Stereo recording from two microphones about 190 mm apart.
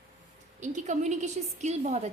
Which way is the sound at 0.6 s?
40° right (ahead or behind).